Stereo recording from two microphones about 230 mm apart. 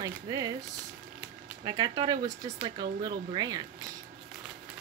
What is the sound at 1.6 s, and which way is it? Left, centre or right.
Speech, right.